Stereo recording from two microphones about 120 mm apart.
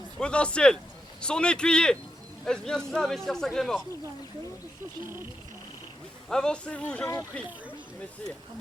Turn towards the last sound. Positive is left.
turn(degrees=10)  # may be behind; listen again after turning